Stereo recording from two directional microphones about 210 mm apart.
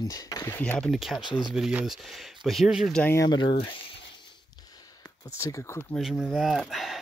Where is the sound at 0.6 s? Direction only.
5° left (ahead or behind); by 3.7 s 25° left (ahead or behind).